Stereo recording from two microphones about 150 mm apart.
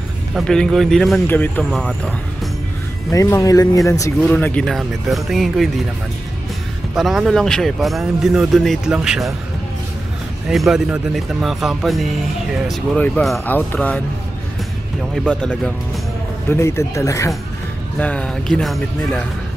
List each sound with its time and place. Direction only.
0.3 s speech: centre (ahead or behind)
3.1 s speech: 20° left (ahead or behind)
4.2 s speech: 10° left (ahead or behind)
7.0 s speech: centre (ahead or behind)
10.5 s speech: centre (ahead or behind)
15.2 s speech: 5° left (ahead or behind)
16.4 s speech: 20° left (ahead or behind)
17.9 s speech: 10° left (ahead or behind)